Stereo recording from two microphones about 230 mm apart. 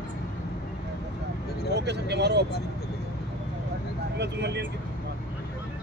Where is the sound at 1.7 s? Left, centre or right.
Right.